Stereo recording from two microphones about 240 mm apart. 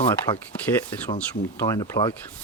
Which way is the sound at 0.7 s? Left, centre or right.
Centre.